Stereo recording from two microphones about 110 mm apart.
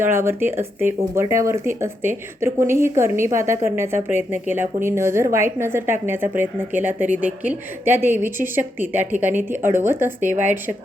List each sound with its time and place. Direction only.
0.0 s speech: 20° right (ahead or behind)